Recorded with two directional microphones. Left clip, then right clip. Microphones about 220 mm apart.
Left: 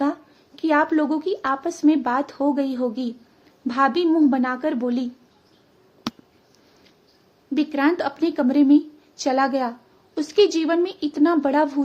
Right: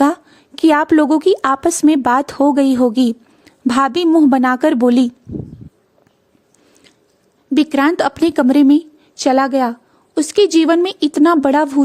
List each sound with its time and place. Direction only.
0.0 s a woman's voice: 50° right (ahead or behind)
7.5 s a woman's voice: 45° right (ahead or behind)